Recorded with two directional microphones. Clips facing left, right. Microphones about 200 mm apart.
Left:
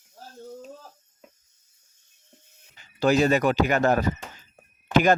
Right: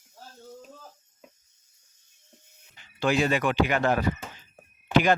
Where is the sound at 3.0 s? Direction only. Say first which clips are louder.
Left 4 dB; 40° left (ahead or behind).